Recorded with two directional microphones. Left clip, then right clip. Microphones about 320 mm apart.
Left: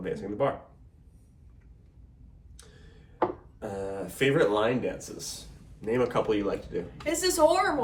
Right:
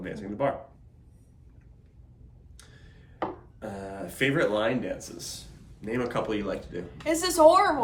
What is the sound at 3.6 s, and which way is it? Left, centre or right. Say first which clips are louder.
Speech: left 3 dB; centre.